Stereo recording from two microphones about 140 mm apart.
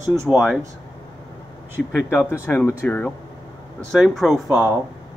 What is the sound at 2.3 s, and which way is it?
Speech, 15° left (ahead or behind).